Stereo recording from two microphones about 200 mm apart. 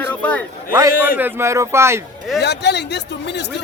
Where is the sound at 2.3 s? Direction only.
55° left (ahead or behind).